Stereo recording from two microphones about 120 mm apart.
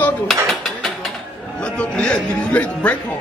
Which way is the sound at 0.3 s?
Centre (ahead or behind).